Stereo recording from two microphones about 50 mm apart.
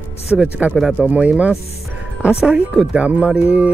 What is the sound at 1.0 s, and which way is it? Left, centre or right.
Music, centre.